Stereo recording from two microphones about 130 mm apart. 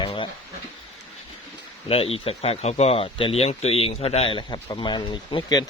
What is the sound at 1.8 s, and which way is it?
Speech, 45° left (ahead or behind).